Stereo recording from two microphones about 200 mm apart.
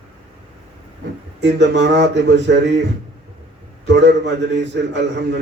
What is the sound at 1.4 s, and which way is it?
A man's voice, 60° right (ahead or behind).